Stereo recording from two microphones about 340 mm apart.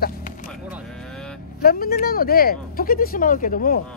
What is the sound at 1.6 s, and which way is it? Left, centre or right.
Speech, left.